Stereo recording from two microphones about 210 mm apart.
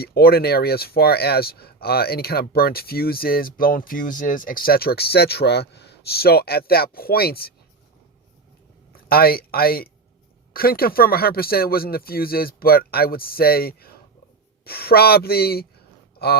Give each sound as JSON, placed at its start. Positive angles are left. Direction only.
{"t": 0.0, "sound": "speech", "side_deg": 45}
{"t": 9.0, "sound": "speech", "side_deg": 45}
{"t": 16.1, "sound": "a sound", "side_deg": 50}